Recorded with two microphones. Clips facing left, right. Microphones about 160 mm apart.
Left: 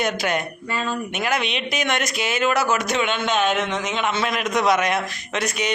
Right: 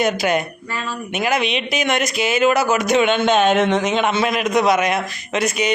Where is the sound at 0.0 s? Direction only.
5° right (ahead or behind); by 3.5 s 25° right (ahead or behind).